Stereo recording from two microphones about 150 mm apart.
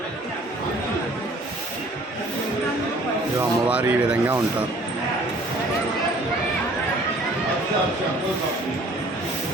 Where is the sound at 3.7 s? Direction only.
10° right (ahead or behind).